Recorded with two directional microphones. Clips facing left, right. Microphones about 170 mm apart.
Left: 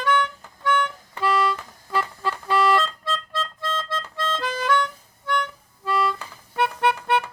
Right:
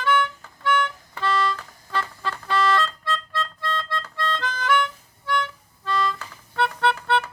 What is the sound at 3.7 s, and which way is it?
Music, 20° left (ahead or behind).